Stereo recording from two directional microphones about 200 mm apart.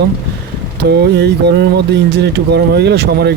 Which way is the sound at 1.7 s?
55° right (ahead or behind).